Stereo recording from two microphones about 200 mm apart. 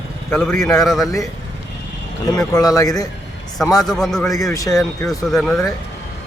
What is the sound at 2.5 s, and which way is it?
Speech, 20° left (ahead or behind).